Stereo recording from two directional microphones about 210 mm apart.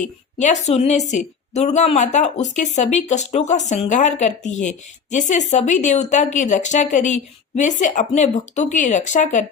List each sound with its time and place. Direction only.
0.0 s speech: 35° left (ahead or behind)